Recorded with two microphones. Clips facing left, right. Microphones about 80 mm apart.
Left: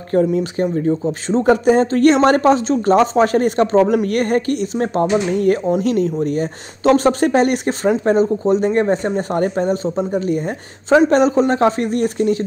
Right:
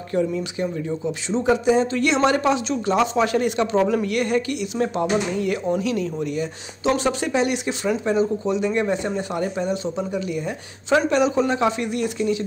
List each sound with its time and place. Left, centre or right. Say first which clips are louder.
0.1 s speech: left 7 dB; left